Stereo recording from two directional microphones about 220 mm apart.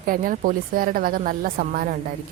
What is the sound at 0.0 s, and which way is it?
Speech, 40° right (ahead or behind).